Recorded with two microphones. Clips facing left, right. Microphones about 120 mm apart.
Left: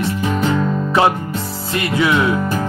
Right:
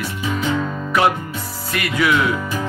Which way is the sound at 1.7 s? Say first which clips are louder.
Left 2 dB; 25° left (ahead or behind).